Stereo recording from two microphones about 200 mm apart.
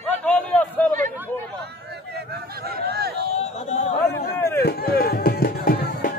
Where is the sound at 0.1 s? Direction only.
5° left (ahead or behind).